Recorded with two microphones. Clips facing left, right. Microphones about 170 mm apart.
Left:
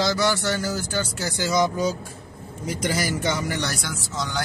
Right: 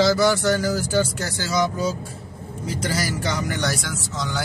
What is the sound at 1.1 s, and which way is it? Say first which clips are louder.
Speech: even; 15° left (ahead or behind).